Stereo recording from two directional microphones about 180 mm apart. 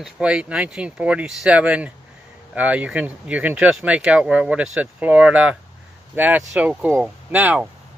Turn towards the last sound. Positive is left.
turn(degrees=-10)  # may be behind; listen again after turning